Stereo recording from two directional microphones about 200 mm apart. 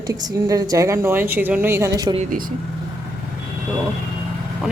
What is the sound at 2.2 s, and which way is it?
Speech, 45° right (ahead or behind).